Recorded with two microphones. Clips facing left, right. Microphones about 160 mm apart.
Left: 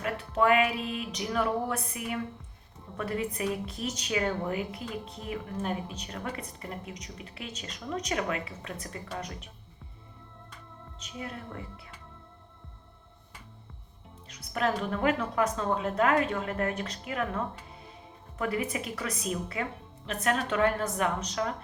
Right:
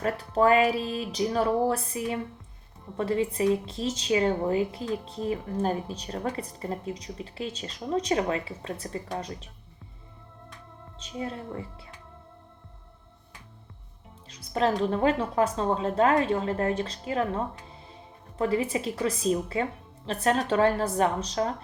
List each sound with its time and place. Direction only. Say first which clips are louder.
0.0 s a woman's voice: right 4 dB; 35° right (ahead or behind)
11.0 s a woman's voice: right 6 dB; 30° right (ahead or behind)
14.3 s a woman's voice: right 4 dB; 30° right (ahead or behind)